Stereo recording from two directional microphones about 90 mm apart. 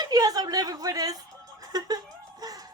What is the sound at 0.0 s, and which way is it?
Music, 45° right (ahead or behind).